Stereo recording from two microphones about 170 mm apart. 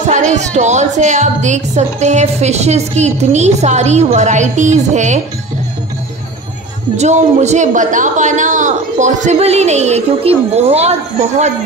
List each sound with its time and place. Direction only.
0.0 s a woman's voice: 45° right (ahead or behind)
7.0 s a woman's voice: 40° right (ahead or behind)